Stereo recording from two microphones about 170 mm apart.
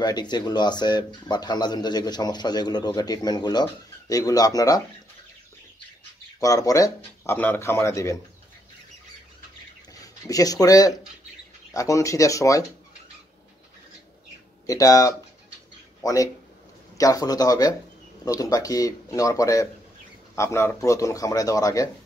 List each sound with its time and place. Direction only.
0.0 s speech: 25° left (ahead or behind)
6.4 s speech: 20° left (ahead or behind)
9.9 s speech: 20° left (ahead or behind)
14.7 s speech: 20° left (ahead or behind)